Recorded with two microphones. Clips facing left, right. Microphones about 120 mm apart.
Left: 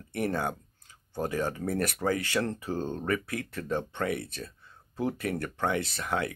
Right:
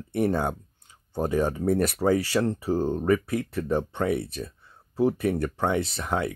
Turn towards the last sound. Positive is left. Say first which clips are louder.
# right 3 dB
turn(degrees=-20)  # may be behind; listen again after turning